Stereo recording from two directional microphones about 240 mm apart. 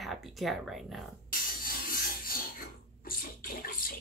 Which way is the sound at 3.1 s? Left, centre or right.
Left.